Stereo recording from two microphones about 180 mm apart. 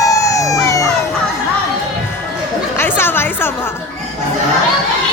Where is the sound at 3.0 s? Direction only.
10° left (ahead or behind).